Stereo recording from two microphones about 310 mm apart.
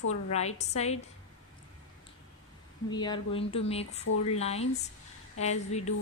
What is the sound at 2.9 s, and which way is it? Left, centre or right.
Speech, centre.